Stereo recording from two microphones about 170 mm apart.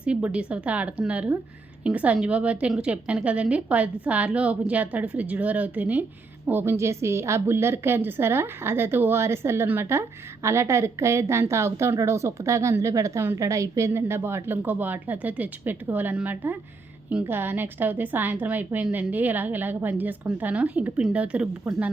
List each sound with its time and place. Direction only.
0.0 s a woman's voice: 5° right (ahead or behind)